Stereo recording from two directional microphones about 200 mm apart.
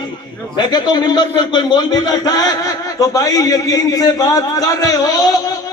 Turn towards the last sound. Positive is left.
turn(degrees=15)  # may be behind; listen again after turning